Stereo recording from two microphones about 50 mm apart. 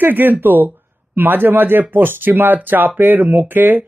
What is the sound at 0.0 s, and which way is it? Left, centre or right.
Speech, right.